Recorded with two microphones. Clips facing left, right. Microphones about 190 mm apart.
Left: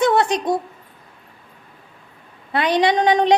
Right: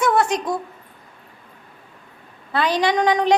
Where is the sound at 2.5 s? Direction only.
20° left (ahead or behind).